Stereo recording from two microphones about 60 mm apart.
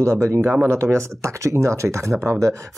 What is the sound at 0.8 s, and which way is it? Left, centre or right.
Speech, right.